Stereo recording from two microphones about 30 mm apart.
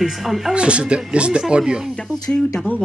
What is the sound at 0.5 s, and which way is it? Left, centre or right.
Speech, right.